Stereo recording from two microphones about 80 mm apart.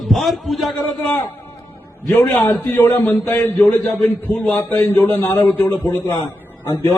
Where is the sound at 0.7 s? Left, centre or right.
Left.